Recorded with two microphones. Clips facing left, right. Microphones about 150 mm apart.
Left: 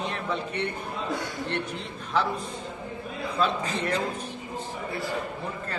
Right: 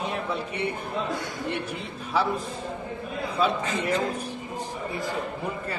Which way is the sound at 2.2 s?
5° right (ahead or behind).